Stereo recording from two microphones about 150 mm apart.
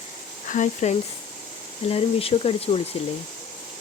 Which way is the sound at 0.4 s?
55° left (ahead or behind).